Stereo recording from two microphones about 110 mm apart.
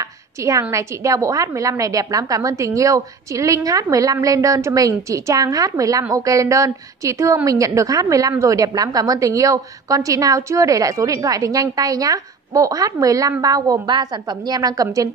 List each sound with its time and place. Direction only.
0.4 s a woman's voice: 30° right (ahead or behind)